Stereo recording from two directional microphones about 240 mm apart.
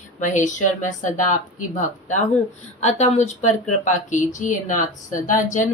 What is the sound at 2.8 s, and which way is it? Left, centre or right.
Speech, left.